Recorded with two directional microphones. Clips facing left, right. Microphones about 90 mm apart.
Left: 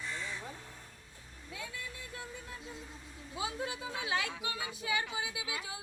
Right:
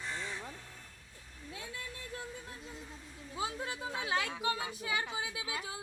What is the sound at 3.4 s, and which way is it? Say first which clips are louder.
Speech: even; 40° right (ahead or behind).